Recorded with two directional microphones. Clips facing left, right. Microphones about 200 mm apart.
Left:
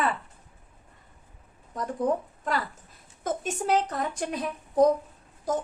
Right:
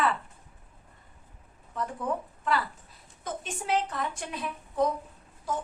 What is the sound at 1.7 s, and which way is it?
A woman's voice, 40° left (ahead or behind).